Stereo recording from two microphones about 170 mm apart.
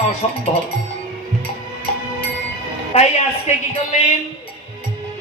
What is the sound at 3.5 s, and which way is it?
Speech, 40° left (ahead or behind).